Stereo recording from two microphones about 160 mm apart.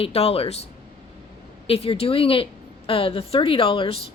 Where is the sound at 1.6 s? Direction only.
40° left (ahead or behind).